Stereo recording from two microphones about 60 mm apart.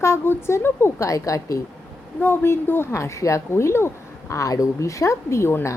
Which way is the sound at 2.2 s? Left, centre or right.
Left.